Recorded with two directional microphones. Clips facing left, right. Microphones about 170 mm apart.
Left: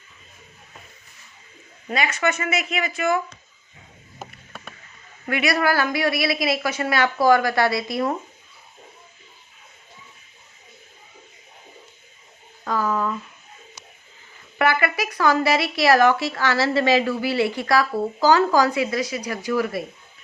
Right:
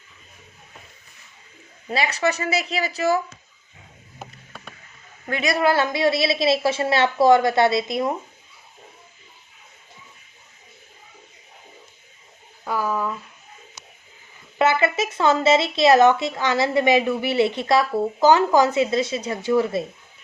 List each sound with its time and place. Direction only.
1.9 s speech: 30° right (ahead or behind)
5.4 s speech: 20° right (ahead or behind)
12.6 s a sound: 10° right (ahead or behind)
14.6 s speech: 20° right (ahead or behind)